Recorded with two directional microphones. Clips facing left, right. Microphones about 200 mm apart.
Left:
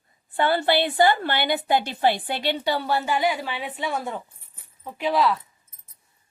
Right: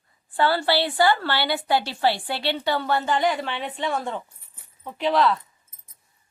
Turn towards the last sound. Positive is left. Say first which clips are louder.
# right 1 dB
turn(degrees=5)  # may be behind; listen again after turning